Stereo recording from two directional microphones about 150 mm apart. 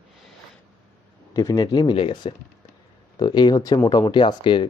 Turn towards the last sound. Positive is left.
turn(degrees=30)  # may be behind; listen again after turning